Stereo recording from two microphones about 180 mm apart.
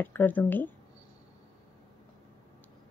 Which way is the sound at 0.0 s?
10° left (ahead or behind).